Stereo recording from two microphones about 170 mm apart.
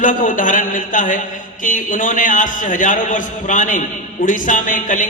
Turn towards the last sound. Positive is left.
turn(degrees=50)  # may be behind; listen again after turning